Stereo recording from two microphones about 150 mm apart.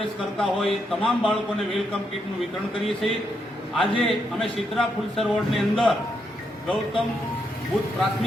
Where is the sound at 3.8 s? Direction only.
Centre (ahead or behind).